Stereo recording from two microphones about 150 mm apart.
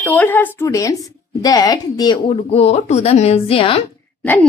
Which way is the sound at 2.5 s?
45° left (ahead or behind).